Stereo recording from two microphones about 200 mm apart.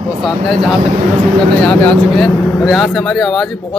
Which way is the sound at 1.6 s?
5° left (ahead or behind).